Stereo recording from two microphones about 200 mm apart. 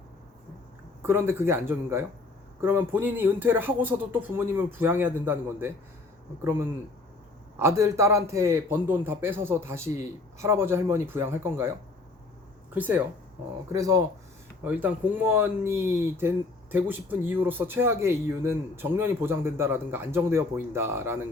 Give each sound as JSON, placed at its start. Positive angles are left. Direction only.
{"t": 1.0, "sound": "a man's voice", "side_deg": -10}
{"t": 7.6, "sound": "a man's voice", "side_deg": -15}
{"t": 12.7, "sound": "a man's voice", "side_deg": -10}